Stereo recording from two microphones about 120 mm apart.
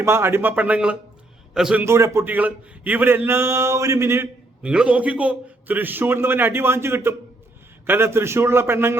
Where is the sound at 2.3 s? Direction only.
15° right (ahead or behind).